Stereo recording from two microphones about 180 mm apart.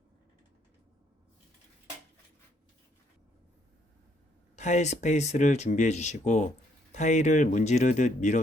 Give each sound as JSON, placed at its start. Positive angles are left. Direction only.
{"t": 4.5, "sound": "speech", "side_deg": 40}